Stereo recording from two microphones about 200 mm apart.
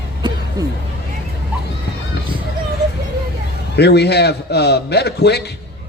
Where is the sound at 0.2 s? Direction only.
20° right (ahead or behind).